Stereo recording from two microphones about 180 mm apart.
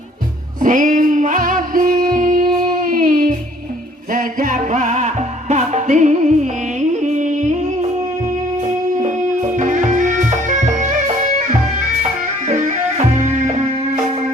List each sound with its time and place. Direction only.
0.6 s music: 45° right (ahead or behind)